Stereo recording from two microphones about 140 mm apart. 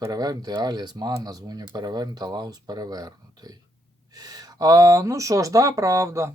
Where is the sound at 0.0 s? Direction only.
25° right (ahead or behind).